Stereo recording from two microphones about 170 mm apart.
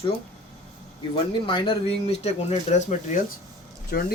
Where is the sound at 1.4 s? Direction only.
30° left (ahead or behind).